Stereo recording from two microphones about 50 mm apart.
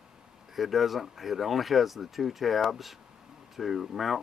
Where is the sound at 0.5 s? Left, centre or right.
Centre.